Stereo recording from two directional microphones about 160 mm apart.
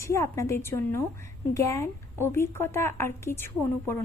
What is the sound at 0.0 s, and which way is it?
A woman's voice, 20° left (ahead or behind).